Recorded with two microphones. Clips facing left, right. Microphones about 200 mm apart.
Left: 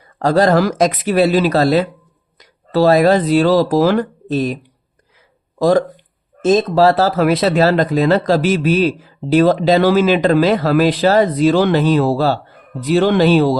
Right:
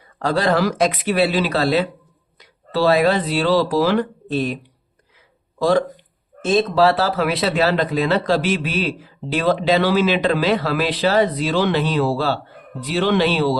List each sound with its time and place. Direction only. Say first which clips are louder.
0.2 s speech: left 5 dB; 45° left (ahead or behind)
5.5 s speech: left 4 dB; 40° left (ahead or behind)